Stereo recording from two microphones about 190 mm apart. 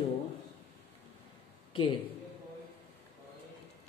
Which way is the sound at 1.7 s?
25° left (ahead or behind).